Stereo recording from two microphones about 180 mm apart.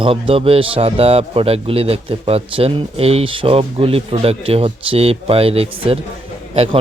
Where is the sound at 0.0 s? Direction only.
30° right (ahead or behind).